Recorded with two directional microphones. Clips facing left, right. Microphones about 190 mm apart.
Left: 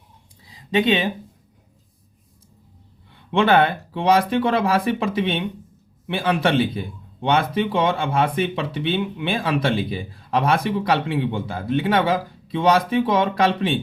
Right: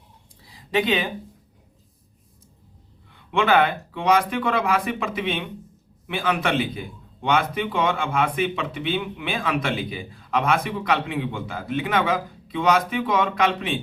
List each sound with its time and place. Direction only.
0.7 s speech: 25° left (ahead or behind)
3.3 s a man's voice: 30° left (ahead or behind)